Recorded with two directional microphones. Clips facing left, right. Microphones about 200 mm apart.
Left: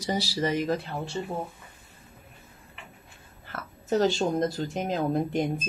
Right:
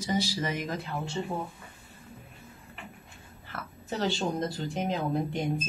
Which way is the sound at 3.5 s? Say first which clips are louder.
Left 9 dB; 45° left (ahead or behind).